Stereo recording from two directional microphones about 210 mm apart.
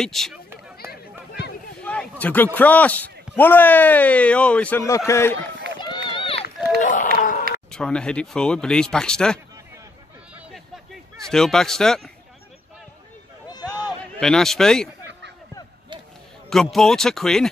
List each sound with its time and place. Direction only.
0.0 s speech: centre (ahead or behind)
1.8 s a man's voice: 5° left (ahead or behind)
6.1 s run: 25° left (ahead or behind)
6.8 s a sound: 40° left (ahead or behind)
7.7 s speech: 5° left (ahead or behind)
11.2 s speech: centre (ahead or behind)
13.5 s a sound: 20° left (ahead or behind)
14.2 s speech: centre (ahead or behind)
16.4 s speech: centre (ahead or behind)